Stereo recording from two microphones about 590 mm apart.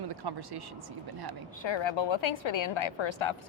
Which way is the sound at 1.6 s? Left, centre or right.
Left.